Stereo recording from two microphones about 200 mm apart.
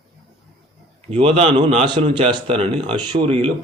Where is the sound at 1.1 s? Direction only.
30° right (ahead or behind).